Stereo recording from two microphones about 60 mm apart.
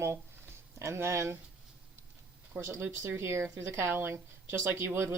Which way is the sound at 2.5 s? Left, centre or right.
Right.